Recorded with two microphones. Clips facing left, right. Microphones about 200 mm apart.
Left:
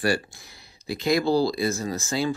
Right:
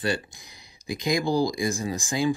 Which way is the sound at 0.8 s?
15° right (ahead or behind).